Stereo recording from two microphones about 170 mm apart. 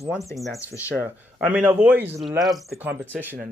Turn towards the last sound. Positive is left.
turn(degrees=-10)  # may be behind; listen again after turning